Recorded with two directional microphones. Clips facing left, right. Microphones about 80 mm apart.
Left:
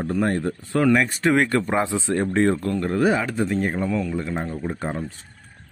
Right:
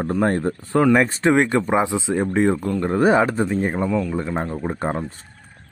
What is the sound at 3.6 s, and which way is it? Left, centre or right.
Speech, centre.